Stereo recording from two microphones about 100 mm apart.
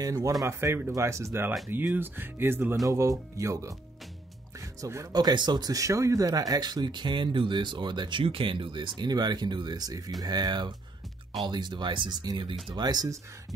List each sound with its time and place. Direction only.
0.0 s speech: 35° right (ahead or behind); by 2.7 s 20° right (ahead or behind)
2.9 s speech: 30° right (ahead or behind)
4.6 s music: 30° right (ahead or behind)
5.1 s speech: 45° right (ahead or behind)